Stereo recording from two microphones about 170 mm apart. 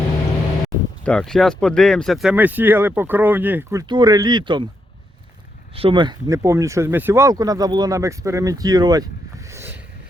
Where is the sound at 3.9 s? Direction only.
25° right (ahead or behind).